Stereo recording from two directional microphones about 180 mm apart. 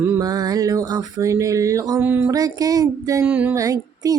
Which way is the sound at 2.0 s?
10° right (ahead or behind).